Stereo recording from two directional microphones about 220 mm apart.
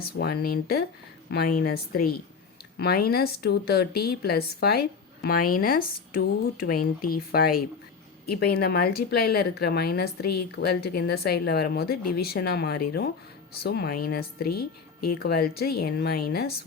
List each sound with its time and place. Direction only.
0.0 s speech: 45° left (ahead or behind)